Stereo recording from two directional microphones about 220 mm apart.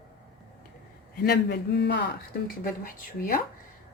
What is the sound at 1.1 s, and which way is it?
Speech, 45° left (ahead or behind).